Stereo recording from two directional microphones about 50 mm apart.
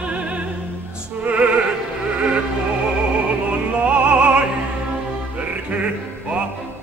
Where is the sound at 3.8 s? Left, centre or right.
Right.